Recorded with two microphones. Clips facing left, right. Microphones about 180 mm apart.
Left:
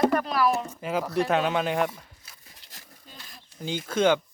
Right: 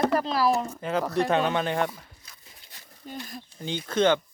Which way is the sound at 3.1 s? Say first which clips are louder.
Right 13 dB; 45° right (ahead or behind).